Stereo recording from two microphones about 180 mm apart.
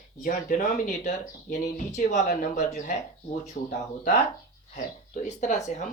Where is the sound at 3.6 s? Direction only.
55° left (ahead or behind).